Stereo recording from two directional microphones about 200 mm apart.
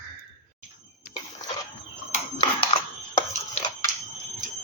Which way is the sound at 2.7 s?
30° left (ahead or behind).